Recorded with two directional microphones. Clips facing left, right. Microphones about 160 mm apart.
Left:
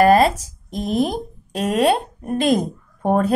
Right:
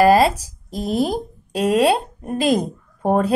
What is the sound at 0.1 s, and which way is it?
Speech, 30° right (ahead or behind).